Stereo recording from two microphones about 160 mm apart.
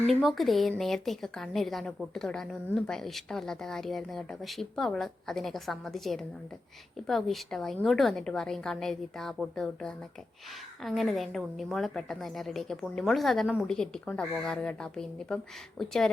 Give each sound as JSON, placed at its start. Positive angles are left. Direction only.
{"t": 0.1, "sound": "a woman's voice", "side_deg": 0}